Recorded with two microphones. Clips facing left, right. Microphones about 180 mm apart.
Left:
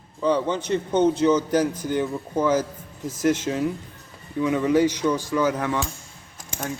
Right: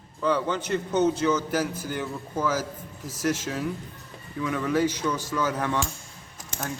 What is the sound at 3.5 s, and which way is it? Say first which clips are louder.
Speech: left 5 dB; 20° left (ahead or behind).